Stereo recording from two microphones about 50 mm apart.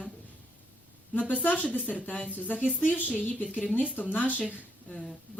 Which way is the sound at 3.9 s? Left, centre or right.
Left.